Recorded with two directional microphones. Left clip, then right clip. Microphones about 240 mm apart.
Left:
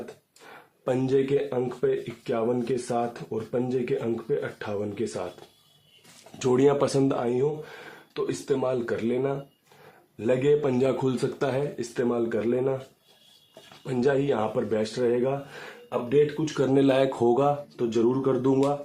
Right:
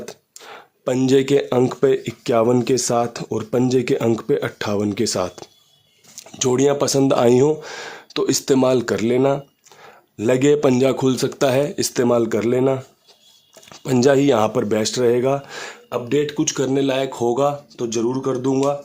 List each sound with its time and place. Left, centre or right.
0.5 s a sound: right
1.1 s speech: right
6.4 s speech: right
13.8 s speech: right
16.4 s speech: right
16.6 s speech: centre